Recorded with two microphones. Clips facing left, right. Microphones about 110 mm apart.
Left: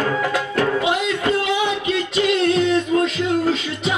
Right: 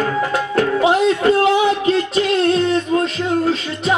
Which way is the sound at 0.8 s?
40° right (ahead or behind).